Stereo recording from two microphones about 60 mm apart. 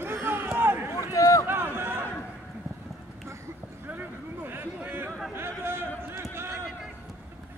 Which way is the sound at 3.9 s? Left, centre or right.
Right.